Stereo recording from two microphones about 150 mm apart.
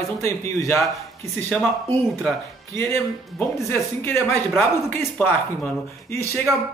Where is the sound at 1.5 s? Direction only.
5° left (ahead or behind).